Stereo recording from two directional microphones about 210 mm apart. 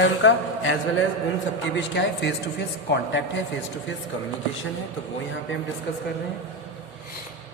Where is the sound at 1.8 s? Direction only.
55° left (ahead or behind).